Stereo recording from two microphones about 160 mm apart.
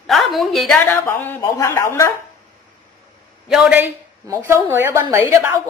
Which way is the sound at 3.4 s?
5° right (ahead or behind).